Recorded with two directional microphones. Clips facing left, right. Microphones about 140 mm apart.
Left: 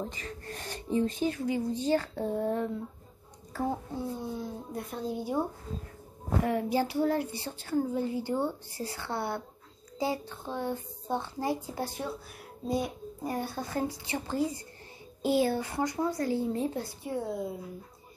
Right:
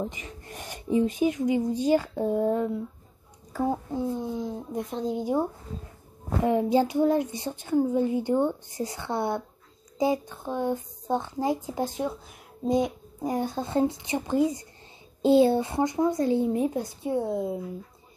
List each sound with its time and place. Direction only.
0.0 s speech: 15° right (ahead or behind)
6.4 s speech: 20° right (ahead or behind)